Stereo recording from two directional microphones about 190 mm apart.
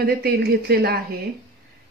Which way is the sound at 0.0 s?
55° right (ahead or behind).